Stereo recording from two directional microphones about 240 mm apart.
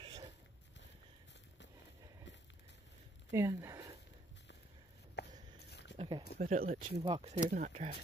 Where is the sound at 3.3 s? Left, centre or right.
Centre.